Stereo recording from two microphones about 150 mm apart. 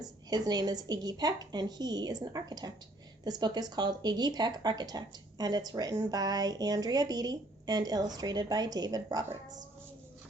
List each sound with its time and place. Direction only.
0.0 s speech: 25° right (ahead or behind)